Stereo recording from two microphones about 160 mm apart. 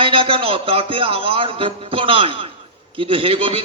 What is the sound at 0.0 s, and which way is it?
A man's voice, 35° right (ahead or behind).